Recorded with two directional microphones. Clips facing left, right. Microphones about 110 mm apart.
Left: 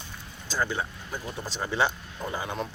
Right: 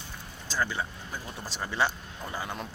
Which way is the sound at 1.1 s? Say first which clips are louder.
Left 4 dB; 10° left (ahead or behind).